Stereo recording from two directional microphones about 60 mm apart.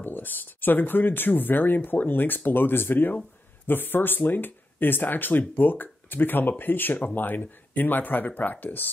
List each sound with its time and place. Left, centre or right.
0.0 s speech: left